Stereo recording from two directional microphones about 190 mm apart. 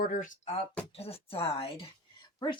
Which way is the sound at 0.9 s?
30° left (ahead or behind).